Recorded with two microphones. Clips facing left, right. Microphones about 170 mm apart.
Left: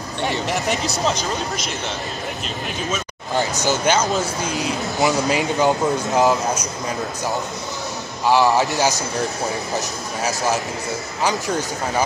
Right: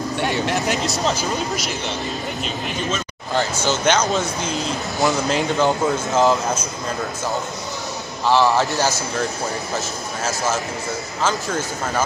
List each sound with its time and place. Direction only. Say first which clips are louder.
0.5 s speech: right 1 dB; centre (ahead or behind)
3.3 s speech: even; 10° left (ahead or behind)
5.1 s speech: even; 15° left (ahead or behind)
8.3 s speech: left 1 dB; 15° left (ahead or behind)